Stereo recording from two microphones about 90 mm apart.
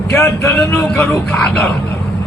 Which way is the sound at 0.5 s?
30° left (ahead or behind).